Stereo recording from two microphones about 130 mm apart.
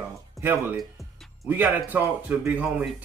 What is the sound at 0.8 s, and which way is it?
Music, centre (ahead or behind).